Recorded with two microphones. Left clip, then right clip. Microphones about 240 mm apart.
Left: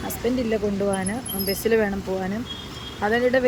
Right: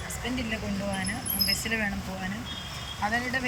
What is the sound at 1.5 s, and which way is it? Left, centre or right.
Speech, centre.